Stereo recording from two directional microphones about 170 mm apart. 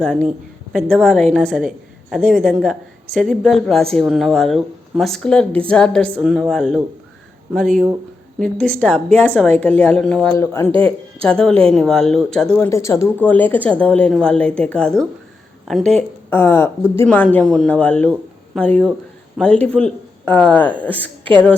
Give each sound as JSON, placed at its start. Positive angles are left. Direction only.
{"t": 0.0, "sound": "a woman's voice", "side_deg": 0}
{"t": 6.1, "sound": "a woman's voice", "side_deg": -5}
{"t": 8.4, "sound": "speech", "side_deg": 5}
{"t": 10.3, "sound": "speech", "side_deg": 15}
{"t": 10.7, "sound": "speech", "side_deg": -30}
{"t": 11.3, "sound": "a woman's voice", "side_deg": 5}
{"t": 12.5, "sound": "speech", "side_deg": 15}